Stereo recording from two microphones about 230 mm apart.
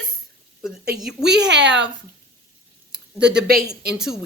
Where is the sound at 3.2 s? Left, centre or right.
Right.